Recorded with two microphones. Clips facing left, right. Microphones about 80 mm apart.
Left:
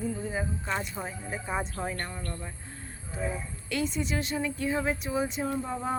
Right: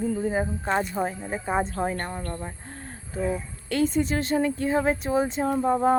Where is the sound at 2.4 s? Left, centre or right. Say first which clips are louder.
Right 5 dB; right.